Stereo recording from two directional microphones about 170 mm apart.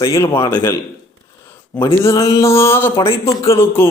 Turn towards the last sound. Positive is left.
turn(degrees=15)  # may be behind; listen again after turning